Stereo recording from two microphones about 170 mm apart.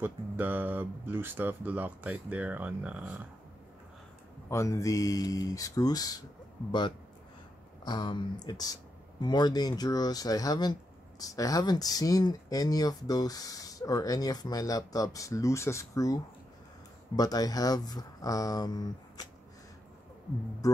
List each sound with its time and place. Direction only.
0.0 s speech: 10° right (ahead or behind)
4.5 s speech: 20° left (ahead or behind)
7.8 s speech: 25° left (ahead or behind)
20.6 s speech: 20° left (ahead or behind)